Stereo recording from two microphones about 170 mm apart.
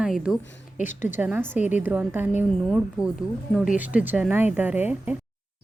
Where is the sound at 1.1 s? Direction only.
10° right (ahead or behind).